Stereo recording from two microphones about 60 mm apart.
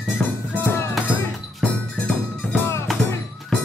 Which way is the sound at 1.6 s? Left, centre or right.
Centre.